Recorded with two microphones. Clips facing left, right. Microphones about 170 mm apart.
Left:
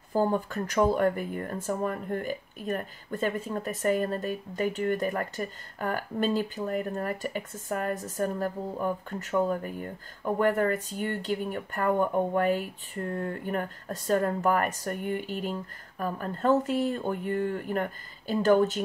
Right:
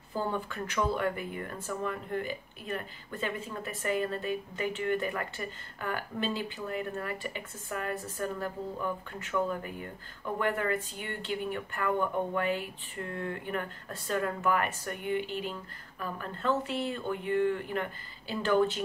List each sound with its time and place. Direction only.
0.1 s speech: 45° left (ahead or behind)